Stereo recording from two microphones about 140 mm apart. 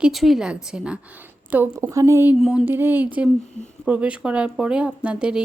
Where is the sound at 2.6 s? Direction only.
15° right (ahead or behind).